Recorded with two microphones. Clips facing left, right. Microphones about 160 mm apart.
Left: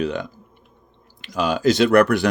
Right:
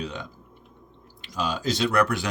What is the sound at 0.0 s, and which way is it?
Speech, 90° left.